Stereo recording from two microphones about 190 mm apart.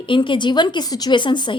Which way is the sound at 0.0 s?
25° left (ahead or behind).